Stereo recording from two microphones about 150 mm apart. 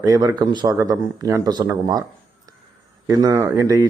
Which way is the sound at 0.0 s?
25° right (ahead or behind).